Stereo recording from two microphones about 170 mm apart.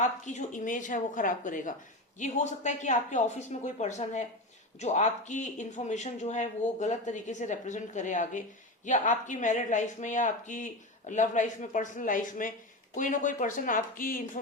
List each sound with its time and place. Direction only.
0.0 s speech: 45° left (ahead or behind)